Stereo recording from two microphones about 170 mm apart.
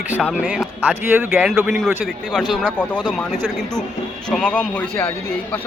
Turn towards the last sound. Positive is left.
turn(degrees=5)  # may be behind; listen again after turning